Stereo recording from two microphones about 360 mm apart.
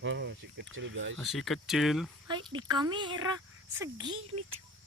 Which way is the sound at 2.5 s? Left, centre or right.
Centre.